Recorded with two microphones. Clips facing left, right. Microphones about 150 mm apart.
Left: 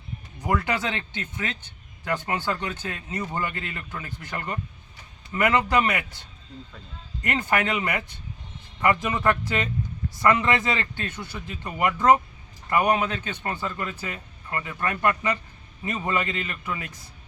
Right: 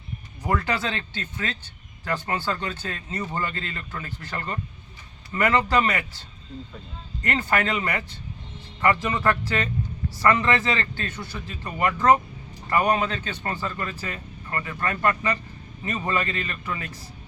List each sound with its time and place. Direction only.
0.4 s speech: 15° left (ahead or behind)